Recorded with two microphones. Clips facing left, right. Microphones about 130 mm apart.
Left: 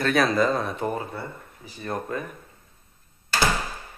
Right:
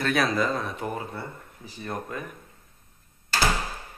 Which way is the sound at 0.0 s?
5° right (ahead or behind).